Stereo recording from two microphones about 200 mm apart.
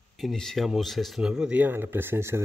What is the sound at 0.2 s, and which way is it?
A man's voice, centre (ahead or behind).